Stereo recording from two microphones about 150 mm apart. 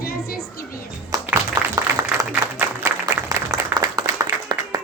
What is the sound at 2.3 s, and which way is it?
Applause, 15° right (ahead or behind).